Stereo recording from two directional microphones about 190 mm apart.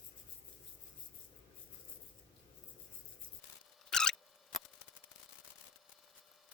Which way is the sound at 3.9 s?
5° left (ahead or behind).